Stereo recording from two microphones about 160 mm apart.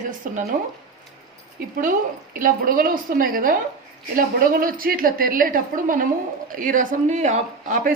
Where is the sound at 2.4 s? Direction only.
60° right (ahead or behind).